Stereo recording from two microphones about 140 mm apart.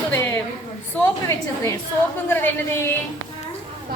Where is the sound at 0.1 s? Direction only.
15° left (ahead or behind).